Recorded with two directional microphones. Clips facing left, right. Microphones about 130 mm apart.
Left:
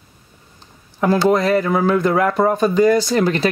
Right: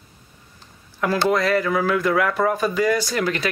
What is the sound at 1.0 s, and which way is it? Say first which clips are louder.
Speech: left 5 dB; 30° left (ahead or behind).